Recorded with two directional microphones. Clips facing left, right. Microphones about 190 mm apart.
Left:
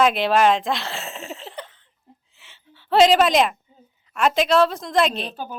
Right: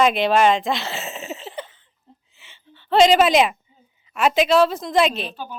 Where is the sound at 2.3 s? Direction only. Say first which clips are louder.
Right 2 dB; centre (ahead or behind).